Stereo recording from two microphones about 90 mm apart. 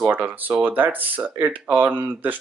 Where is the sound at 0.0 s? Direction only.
15° right (ahead or behind).